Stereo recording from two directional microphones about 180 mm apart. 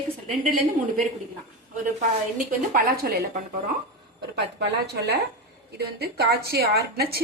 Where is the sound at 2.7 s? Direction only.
55° right (ahead or behind).